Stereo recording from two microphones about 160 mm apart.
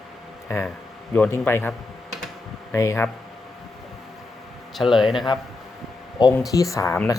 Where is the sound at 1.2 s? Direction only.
15° left (ahead or behind).